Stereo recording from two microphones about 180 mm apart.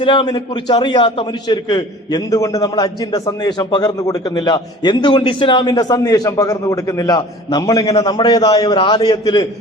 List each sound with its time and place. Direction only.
0.0 s a man's voice: 25° left (ahead or behind)